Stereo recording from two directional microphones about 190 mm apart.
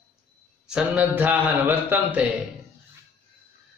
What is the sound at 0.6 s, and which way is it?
A man's voice, 5° right (ahead or behind).